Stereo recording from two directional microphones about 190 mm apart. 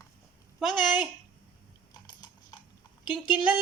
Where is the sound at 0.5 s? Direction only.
Centre (ahead or behind).